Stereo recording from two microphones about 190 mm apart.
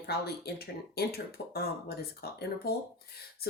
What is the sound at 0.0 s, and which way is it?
Speech, 55° left (ahead or behind).